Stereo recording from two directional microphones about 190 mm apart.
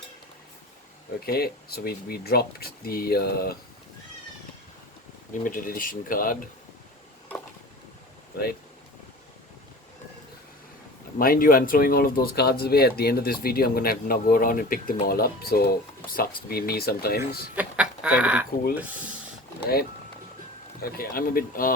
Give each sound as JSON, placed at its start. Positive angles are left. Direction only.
{"t": 1.2, "sound": "speech", "side_deg": 55}
{"t": 5.3, "sound": "speech", "side_deg": 45}
{"t": 11.2, "sound": "speech", "side_deg": 50}
{"t": 17.5, "sound": "speech", "side_deg": -5}
{"t": 20.8, "sound": "speech", "side_deg": 50}